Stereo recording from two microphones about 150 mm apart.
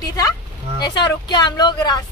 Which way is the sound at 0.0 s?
25° left (ahead or behind).